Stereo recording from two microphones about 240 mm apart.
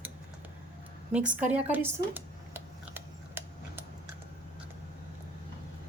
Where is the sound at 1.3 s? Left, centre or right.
Centre.